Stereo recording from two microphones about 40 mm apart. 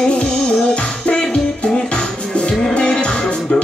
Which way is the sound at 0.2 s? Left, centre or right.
Left.